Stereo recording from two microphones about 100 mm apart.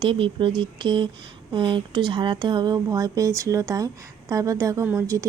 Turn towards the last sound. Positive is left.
turn(degrees=-30)  # may be behind; listen again after turning